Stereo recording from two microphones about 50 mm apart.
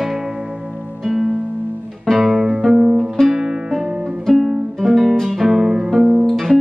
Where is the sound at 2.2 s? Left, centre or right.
Centre.